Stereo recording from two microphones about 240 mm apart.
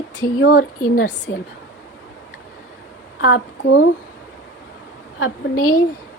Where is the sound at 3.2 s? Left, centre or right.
Left.